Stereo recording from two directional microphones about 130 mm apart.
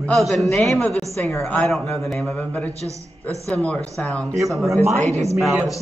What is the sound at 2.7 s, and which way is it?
Speech, 25° right (ahead or behind).